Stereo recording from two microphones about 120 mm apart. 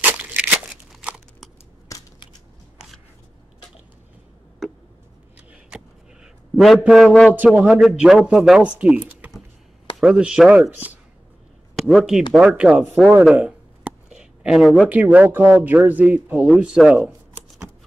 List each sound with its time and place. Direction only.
0.0 s crumpling: 15° right (ahead or behind)
1.9 s crushing: 25° left (ahead or behind)
6.8 s speech: centre (ahead or behind)
7.1 s speech: 10° left (ahead or behind)
7.3 s speech: 10° right (ahead or behind)
11.7 s speech: centre (ahead or behind)
13.2 s a sound: 10° right (ahead or behind)
14.9 s speech: 15° right (ahead or behind)